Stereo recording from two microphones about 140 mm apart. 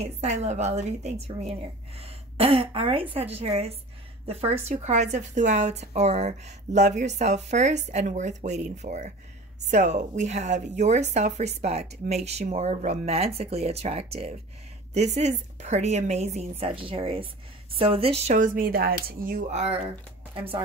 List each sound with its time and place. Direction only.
0.0 s a woman's voice: 50° right (ahead or behind); by 19.5 s 90° right
19.5 s a woman's voice: 50° right (ahead or behind)
20.3 s speech: 40° right (ahead or behind)